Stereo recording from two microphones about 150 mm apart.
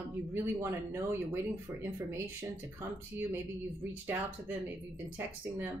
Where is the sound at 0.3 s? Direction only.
15° right (ahead or behind).